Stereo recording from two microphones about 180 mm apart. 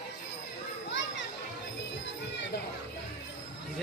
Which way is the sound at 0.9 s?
90° left.